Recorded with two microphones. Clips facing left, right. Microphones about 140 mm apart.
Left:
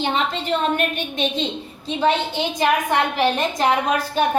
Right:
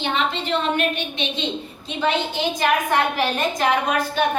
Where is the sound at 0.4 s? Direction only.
45° left (ahead or behind).